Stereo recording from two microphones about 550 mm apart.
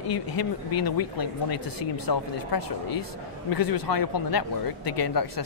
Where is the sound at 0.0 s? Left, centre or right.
Left.